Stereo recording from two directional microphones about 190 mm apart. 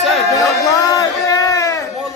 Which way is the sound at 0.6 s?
20° left (ahead or behind).